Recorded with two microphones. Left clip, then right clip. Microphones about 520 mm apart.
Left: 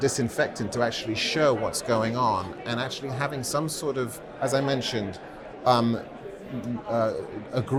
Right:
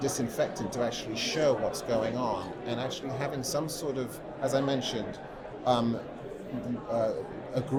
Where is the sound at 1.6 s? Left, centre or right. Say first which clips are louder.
Left 4 dB; left.